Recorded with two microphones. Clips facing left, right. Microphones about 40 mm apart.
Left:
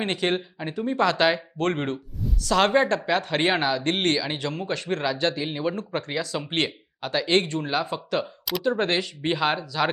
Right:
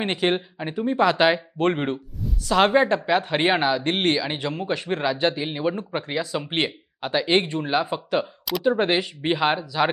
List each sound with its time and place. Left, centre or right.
0.0 s speech: centre